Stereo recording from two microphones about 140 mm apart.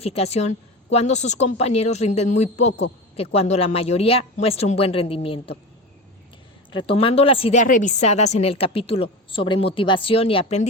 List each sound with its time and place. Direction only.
0.0 s a woman's voice: 45° left (ahead or behind)
6.7 s speech: 40° left (ahead or behind)
7.5 s a woman's voice: 65° left (ahead or behind); by 10.7 s 45° left (ahead or behind)